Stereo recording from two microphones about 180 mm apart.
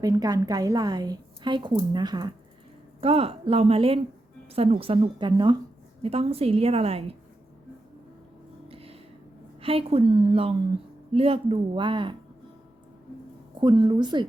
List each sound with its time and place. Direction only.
0.0 s a woman's voice: 20° right (ahead or behind)
8.7 s a sound: 30° right (ahead or behind)
9.6 s a woman's voice: 30° right (ahead or behind)
13.6 s a woman's voice: 25° right (ahead or behind)